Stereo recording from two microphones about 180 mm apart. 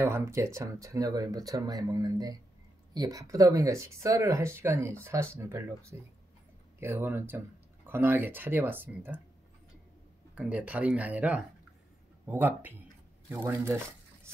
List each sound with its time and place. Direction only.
0.0 s speech: 15° right (ahead or behind)
10.3 s speech: 5° right (ahead or behind)